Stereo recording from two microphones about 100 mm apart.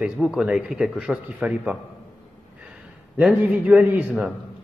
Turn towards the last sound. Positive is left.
turn(degrees=-10)  # may be behind; listen again after turning